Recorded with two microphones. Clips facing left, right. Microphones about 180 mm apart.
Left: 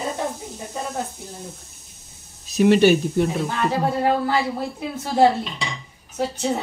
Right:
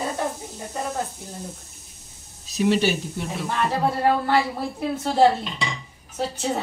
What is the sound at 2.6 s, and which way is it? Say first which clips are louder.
Speech: left 6 dB; 55° left (ahead or behind).